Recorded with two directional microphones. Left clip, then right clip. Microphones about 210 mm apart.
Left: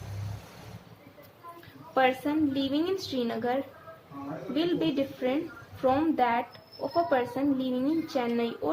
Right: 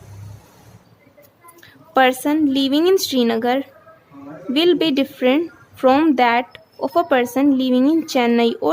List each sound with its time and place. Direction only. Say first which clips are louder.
1.9 s speech: right 10 dB; 50° right (ahead or behind)